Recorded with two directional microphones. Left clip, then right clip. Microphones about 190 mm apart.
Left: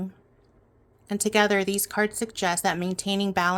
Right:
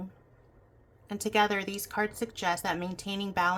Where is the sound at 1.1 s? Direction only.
40° left (ahead or behind).